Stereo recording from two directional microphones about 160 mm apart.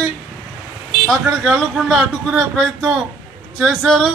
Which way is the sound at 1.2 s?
Centre (ahead or behind).